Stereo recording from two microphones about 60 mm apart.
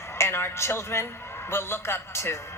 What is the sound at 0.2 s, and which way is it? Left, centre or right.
A man's voice, left.